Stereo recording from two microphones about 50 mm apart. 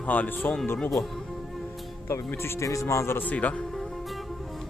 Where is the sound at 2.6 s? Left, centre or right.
Left.